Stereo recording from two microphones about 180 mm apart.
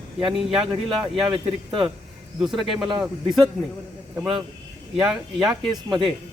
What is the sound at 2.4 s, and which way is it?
Speech, centre (ahead or behind).